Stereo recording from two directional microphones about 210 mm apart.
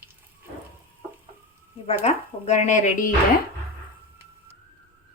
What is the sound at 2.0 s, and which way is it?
Speech, 30° left (ahead or behind).